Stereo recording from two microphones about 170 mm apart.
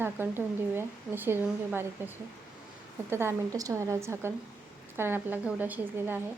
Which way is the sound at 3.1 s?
15° right (ahead or behind).